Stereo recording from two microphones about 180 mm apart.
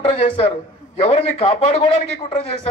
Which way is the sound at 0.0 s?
35° left (ahead or behind).